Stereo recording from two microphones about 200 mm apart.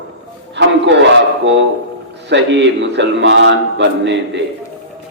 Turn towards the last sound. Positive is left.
turn(degrees=-65)  # may be behind; listen again after turning